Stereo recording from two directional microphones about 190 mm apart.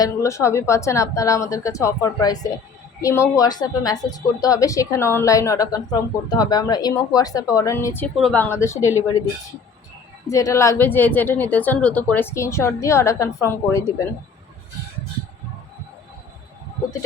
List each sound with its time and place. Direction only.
0.0 s a woman's voice: 15° left (ahead or behind)
10.2 s a woman's voice: 15° left (ahead or behind)